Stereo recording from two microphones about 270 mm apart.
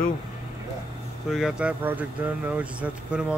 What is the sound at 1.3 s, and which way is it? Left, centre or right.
Speech, centre.